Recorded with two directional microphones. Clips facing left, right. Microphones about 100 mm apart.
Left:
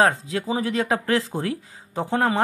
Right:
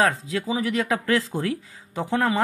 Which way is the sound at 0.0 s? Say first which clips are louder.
Left 2 dB; 30° left (ahead or behind).